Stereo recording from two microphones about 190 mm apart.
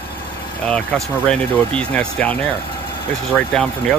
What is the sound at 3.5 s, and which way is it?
Speech, 5° left (ahead or behind).